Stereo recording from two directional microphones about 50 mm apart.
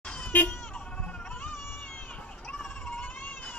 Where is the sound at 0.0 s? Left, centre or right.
Left.